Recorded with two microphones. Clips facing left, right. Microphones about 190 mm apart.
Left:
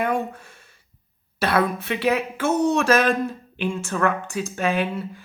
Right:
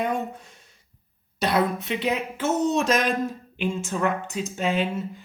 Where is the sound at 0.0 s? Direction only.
65° left (ahead or behind).